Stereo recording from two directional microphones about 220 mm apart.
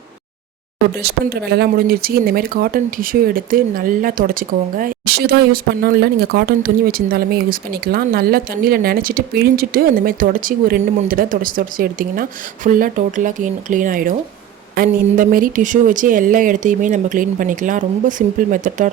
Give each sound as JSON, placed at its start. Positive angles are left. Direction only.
{"t": 0.9, "sound": "speech", "side_deg": -45}